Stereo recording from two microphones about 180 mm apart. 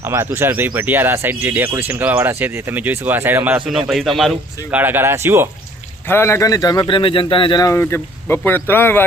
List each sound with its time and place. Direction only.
0.0 s speech: 15° right (ahead or behind)
4.8 s speech: 10° right (ahead or behind)
6.1 s a man's voice: 15° left (ahead or behind)